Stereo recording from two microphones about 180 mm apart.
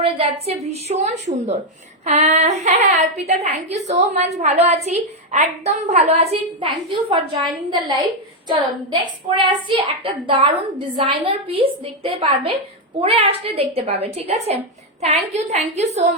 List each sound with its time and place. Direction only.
0.0 s a woman's voice: 35° right (ahead or behind)